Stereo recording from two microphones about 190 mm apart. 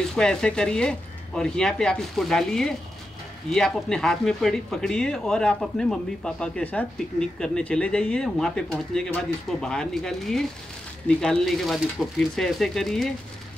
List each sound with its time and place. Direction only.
0.1 s speech: 5° left (ahead or behind)